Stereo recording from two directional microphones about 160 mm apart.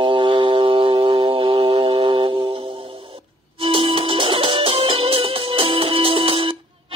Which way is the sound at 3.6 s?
35° right (ahead or behind).